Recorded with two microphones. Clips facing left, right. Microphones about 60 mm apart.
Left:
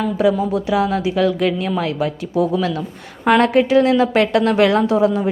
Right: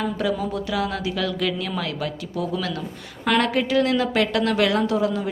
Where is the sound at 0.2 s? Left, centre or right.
Centre.